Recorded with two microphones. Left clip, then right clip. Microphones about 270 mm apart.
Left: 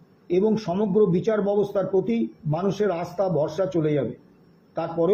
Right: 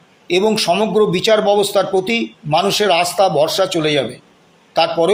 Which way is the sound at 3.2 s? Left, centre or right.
Right.